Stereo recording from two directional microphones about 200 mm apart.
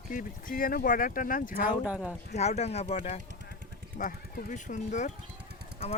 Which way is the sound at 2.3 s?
35° left (ahead or behind).